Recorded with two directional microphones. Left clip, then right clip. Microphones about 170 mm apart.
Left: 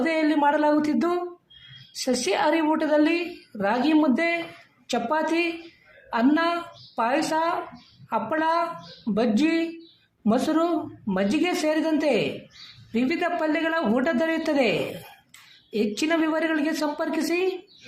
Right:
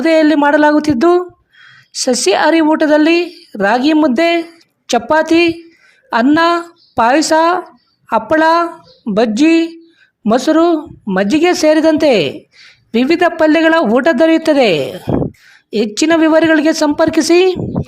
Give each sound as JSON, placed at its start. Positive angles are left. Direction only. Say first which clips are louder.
{"t": 0.0, "sound": "a woman's voice", "louder": "right 12 dB", "side_deg": -60}